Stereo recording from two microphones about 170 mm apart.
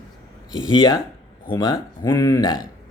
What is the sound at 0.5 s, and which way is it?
Speech, 20° left (ahead or behind).